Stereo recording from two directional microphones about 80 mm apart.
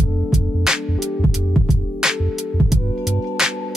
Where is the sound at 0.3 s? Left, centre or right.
Centre.